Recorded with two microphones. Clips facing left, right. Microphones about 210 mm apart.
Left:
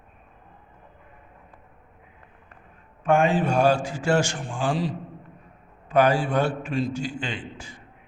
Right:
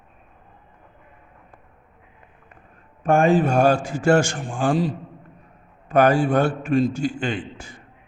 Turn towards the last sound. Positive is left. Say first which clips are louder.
# right 6 dB
turn(degrees=-45)  # may be behind; listen again after turning